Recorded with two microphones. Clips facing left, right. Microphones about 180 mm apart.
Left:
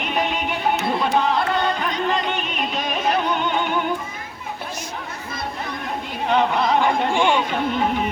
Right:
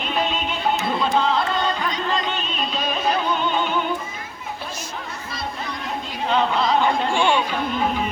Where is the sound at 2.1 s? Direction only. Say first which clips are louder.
Left 2 dB; 15° left (ahead or behind).